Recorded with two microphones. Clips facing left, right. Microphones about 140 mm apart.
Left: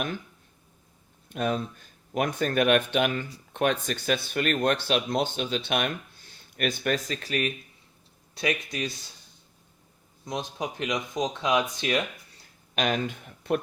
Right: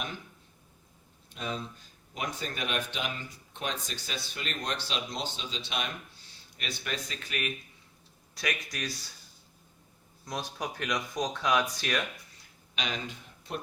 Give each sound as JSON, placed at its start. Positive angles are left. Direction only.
{"t": 1.3, "sound": "speech", "side_deg": 55}
{"t": 8.4, "sound": "speech", "side_deg": 25}
{"t": 10.2, "sound": "speech", "side_deg": 20}
{"t": 12.7, "sound": "speech", "side_deg": 55}